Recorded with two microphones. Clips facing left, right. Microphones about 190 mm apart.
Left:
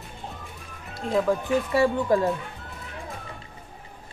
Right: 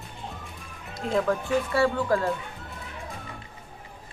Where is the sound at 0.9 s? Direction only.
Centre (ahead or behind).